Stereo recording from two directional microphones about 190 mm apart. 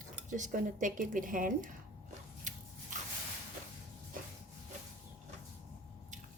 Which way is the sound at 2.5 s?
40° right (ahead or behind).